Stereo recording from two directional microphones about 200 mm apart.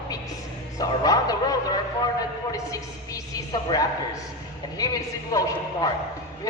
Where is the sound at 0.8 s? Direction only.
20° left (ahead or behind).